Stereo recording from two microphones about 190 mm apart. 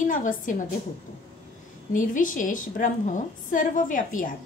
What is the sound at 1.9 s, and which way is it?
A woman's voice, 45° left (ahead or behind).